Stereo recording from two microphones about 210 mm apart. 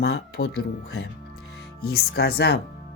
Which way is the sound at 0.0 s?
50° left (ahead or behind).